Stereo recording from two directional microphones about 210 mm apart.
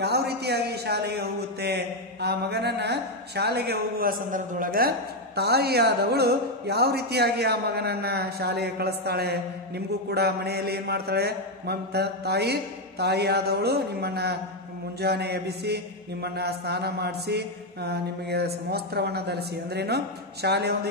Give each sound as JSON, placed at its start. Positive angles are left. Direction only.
{"t": 0.0, "sound": "a man's voice", "side_deg": -50}